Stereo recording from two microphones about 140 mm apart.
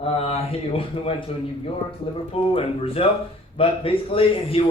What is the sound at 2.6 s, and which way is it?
A man's voice, 45° left (ahead or behind).